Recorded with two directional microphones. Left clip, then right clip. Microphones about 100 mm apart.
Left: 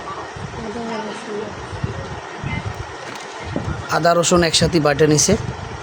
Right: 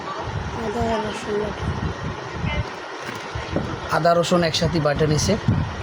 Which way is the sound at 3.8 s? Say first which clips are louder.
Left 3 dB; 60° left (ahead or behind).